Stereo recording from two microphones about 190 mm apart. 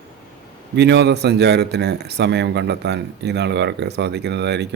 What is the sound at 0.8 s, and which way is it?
A man's voice, 65° right (ahead or behind).